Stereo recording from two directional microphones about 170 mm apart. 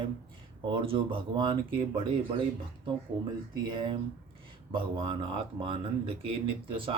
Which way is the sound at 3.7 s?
30° right (ahead or behind).